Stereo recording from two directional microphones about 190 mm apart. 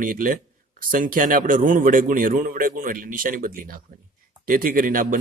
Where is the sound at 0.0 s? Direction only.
45° right (ahead or behind).